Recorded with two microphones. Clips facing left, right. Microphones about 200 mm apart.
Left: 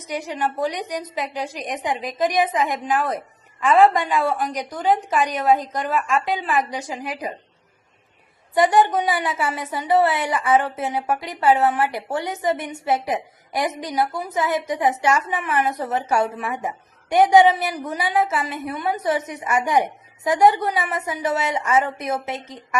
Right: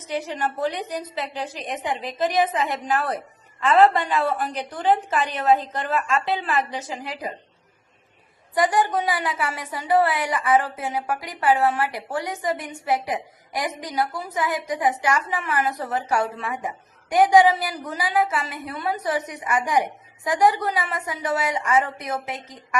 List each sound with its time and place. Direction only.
0.0 s a woman's voice: 10° left (ahead or behind)
8.5 s a woman's voice: 25° left (ahead or behind)